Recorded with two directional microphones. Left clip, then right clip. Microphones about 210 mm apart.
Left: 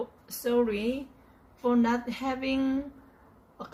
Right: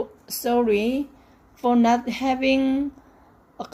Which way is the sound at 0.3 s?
45° right (ahead or behind).